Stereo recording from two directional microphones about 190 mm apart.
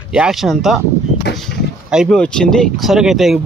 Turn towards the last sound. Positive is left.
turn(degrees=0)  # may be behind; listen again after turning